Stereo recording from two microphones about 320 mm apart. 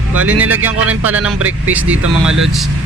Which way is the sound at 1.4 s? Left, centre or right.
Right.